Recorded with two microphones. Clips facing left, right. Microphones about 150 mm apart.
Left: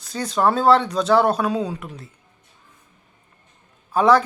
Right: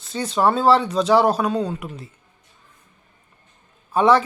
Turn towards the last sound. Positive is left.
turn(degrees=-5)  # may be behind; listen again after turning